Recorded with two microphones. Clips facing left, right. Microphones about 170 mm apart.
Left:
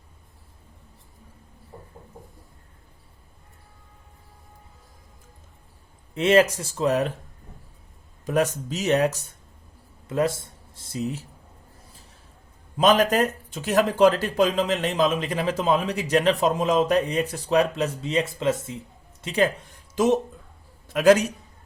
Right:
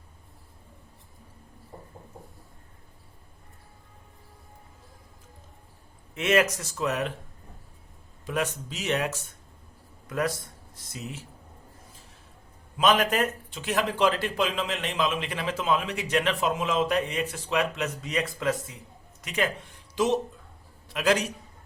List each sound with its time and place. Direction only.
6.1 s speech: 30° left (ahead or behind)
8.3 s speech: 40° left (ahead or behind)
10.1 s speech: 25° left (ahead or behind)
12.7 s speech: 40° left (ahead or behind)
20.0 s speech: 50° left (ahead or behind)
20.8 s a sound: 45° left (ahead or behind)